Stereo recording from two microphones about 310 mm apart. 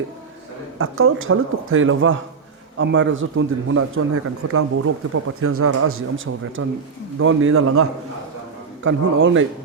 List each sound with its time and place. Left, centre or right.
0.8 s speech: right